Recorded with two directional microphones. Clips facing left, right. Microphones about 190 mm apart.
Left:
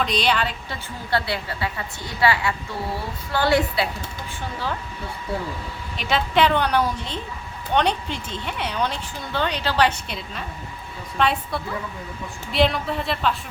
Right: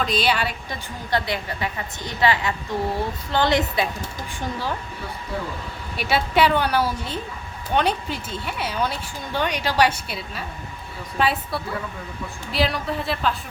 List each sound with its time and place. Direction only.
0.0 s a woman's voice: 5° right (ahead or behind); by 3.8 s 20° right (ahead or behind)
6.0 s a woman's voice: 10° right (ahead or behind)